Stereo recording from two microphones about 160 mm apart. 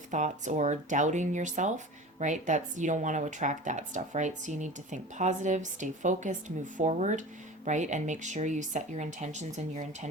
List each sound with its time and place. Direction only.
0.1 s speech: 50° right (ahead or behind)